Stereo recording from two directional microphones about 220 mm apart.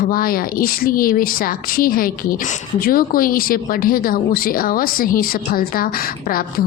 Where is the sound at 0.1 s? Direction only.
40° left (ahead or behind).